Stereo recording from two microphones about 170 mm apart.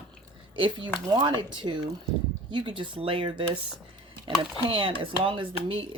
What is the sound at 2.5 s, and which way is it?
Speech, 25° right (ahead or behind).